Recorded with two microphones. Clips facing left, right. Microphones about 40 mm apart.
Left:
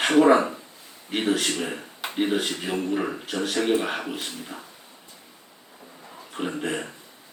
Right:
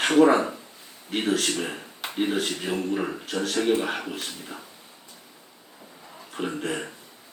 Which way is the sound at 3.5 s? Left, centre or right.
Left.